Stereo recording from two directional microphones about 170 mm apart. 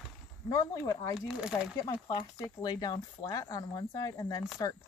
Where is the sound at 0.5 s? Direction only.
20° left (ahead or behind).